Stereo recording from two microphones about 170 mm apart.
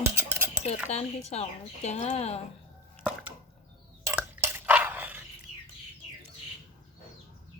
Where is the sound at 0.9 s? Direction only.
40° left (ahead or behind).